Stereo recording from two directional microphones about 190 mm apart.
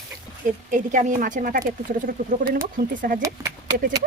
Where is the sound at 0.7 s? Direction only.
40° right (ahead or behind).